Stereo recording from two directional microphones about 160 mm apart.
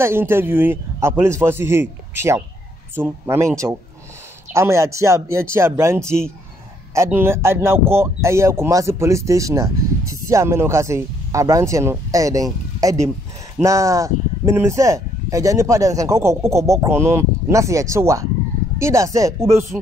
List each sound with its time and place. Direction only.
0.0 s a man's voice: 15° right (ahead or behind)
4.5 s a man's voice: 15° right (ahead or behind)
13.6 s speech: 20° right (ahead or behind)